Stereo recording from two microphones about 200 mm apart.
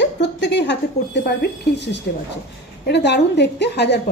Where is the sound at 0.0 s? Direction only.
60° left (ahead or behind).